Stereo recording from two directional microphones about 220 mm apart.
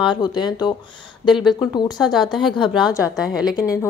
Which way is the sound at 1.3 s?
Centre (ahead or behind).